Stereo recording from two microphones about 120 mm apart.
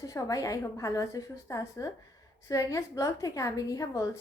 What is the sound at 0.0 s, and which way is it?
A woman's voice, 30° left (ahead or behind).